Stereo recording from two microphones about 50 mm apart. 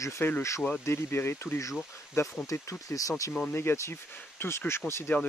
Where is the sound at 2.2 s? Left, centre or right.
Left.